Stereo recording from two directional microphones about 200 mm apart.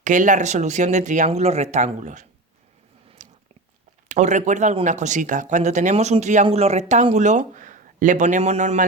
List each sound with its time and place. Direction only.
0.0 s speech: 40° right (ahead or behind)
3.2 s biting: 40° right (ahead or behind)
4.1 s speech: 35° right (ahead or behind)